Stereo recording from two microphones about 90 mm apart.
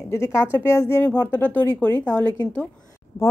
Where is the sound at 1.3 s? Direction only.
20° left (ahead or behind).